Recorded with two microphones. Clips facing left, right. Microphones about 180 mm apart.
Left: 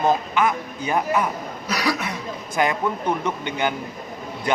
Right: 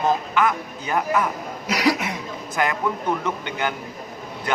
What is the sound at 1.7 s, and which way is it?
Speech, 20° right (ahead or behind).